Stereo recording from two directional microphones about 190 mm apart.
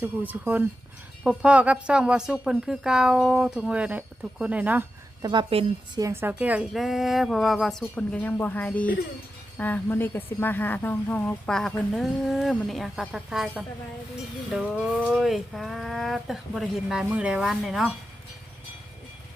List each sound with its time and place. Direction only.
0.0 s a woman's voice: 10° right (ahead or behind)
5.2 s a woman's voice: 25° right (ahead or behind)
6.0 s a woman's voice: 15° right (ahead or behind)